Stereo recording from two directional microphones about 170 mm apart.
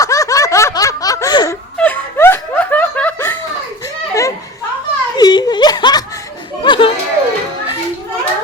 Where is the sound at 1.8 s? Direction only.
10° left (ahead or behind).